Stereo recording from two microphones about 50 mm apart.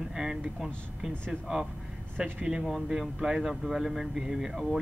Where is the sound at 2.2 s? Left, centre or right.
Centre.